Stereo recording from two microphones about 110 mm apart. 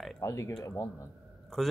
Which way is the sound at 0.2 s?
30° left (ahead or behind).